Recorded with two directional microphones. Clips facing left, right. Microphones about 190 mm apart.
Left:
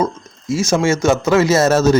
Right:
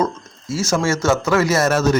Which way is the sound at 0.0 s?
15° left (ahead or behind).